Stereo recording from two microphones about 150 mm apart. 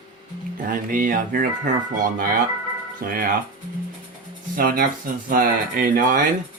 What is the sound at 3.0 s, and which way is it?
Speech, 75° right (ahead or behind).